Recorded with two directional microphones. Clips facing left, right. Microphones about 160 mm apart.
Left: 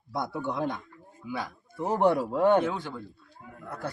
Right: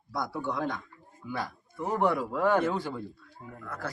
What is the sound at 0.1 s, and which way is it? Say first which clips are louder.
Speech: left 1 dB; 25° left (ahead or behind).